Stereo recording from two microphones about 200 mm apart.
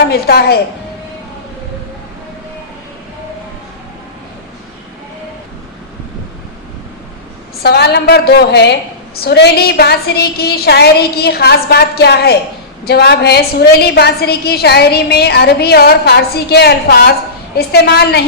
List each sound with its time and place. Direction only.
0.1 s a woman's voice: 55° left (ahead or behind)
7.6 s a woman's voice: 55° left (ahead or behind)